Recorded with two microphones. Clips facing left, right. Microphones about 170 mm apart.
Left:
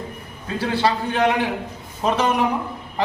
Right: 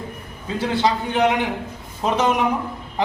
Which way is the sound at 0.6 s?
15° right (ahead or behind).